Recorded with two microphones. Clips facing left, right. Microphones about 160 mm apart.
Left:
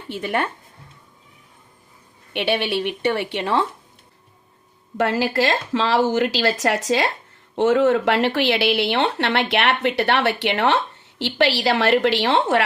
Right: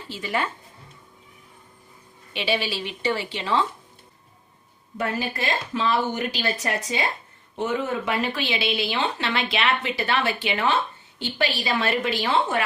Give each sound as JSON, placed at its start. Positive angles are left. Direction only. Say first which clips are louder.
{"t": 0.1, "sound": "a woman's voice", "louder": "left 4 dB", "side_deg": 60}
{"t": 2.3, "sound": "a woman's voice", "louder": "left 5 dB", "side_deg": 60}
{"t": 4.9, "sound": "speech", "louder": "left 8 dB", "side_deg": 90}